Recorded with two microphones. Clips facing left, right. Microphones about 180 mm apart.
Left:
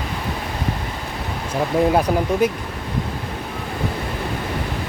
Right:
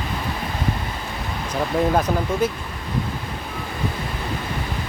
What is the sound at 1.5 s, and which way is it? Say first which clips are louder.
Speech: left 3 dB; 10° left (ahead or behind).